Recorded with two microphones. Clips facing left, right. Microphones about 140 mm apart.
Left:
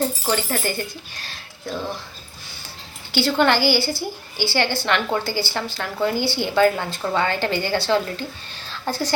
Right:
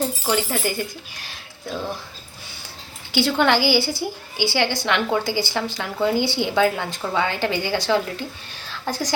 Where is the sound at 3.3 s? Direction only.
10° right (ahead or behind).